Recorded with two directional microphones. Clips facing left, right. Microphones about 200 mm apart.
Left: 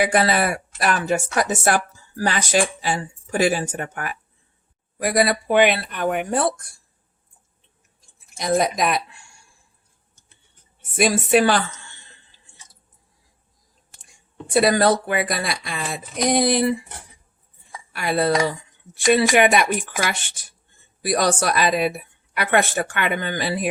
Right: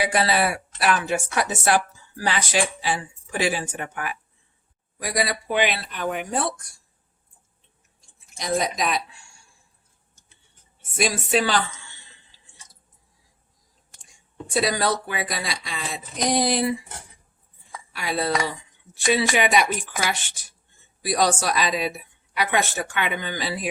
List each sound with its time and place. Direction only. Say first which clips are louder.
0.0 s speech: left 3 dB; 50° left (ahead or behind)
4.9 s speech: left 7 dB; 55° left (ahead or behind)
8.4 s speech: left 4 dB; 55° left (ahead or behind)
10.9 s speech: left 5 dB; 55° left (ahead or behind)
14.5 s speech: left 6 dB; 55° left (ahead or behind)
17.9 s speech: left 5 dB; 55° left (ahead or behind)